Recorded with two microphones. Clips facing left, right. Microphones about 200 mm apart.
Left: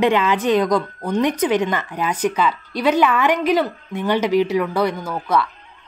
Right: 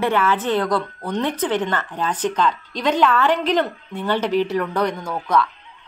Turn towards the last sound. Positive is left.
turn(degrees=5)  # may be behind; listen again after turning